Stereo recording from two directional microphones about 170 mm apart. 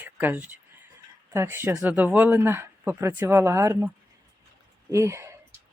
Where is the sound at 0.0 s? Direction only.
10° right (ahead or behind).